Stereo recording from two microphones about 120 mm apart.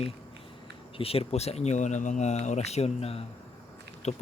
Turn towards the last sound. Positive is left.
turn(degrees=65)  # may be behind; listen again after turning